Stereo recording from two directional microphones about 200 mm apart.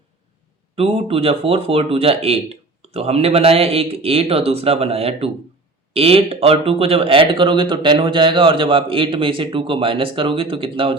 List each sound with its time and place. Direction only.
0.8 s speech: 30° right (ahead or behind)